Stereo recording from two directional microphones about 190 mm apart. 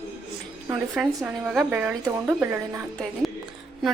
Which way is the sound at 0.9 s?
Centre (ahead or behind).